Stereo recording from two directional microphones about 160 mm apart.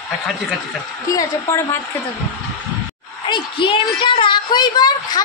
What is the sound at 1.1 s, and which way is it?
Speech, 20° left (ahead or behind).